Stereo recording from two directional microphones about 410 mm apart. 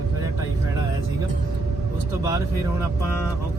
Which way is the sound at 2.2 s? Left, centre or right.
Centre.